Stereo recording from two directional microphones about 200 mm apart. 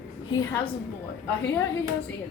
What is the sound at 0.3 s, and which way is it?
Speech, 20° left (ahead or behind).